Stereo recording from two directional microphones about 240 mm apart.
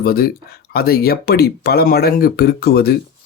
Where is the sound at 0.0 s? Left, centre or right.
Left.